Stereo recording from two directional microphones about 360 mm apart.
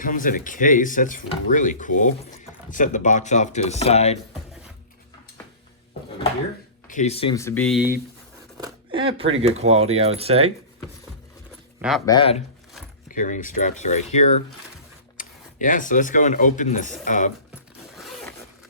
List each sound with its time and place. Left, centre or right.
0.0 s speech: left
6.8 s speech: centre
8.5 s a sound: centre
9.8 s speech: centre
11.8 s speech: centre
12.0 s speech: centre
17.5 s zipper: centre